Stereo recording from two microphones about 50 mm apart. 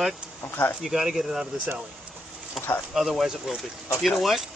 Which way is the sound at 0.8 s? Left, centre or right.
Centre.